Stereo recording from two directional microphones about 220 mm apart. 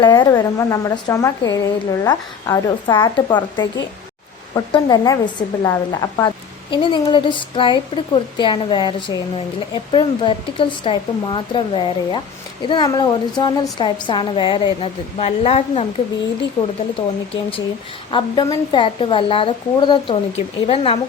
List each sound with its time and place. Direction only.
0.0 s a woman's voice: 20° left (ahead or behind)
18.1 s a woman's voice: 20° left (ahead or behind)